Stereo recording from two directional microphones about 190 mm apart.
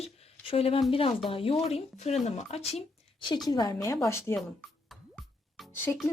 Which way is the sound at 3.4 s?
20° left (ahead or behind).